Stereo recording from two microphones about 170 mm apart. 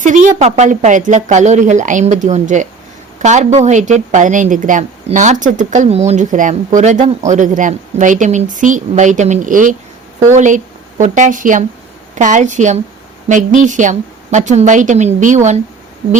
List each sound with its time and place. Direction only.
0.0 s speech: 50° right (ahead or behind)